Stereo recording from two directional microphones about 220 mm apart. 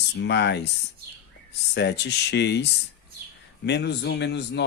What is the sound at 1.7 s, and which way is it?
Speech, 50° left (ahead or behind).